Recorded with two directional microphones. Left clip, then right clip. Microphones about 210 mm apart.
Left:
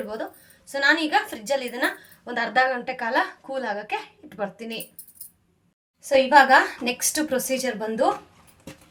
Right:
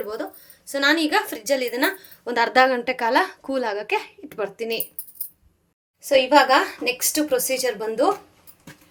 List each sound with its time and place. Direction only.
0.7 s a woman's voice: 35° right (ahead or behind)
6.1 s a woman's voice: 30° right (ahead or behind)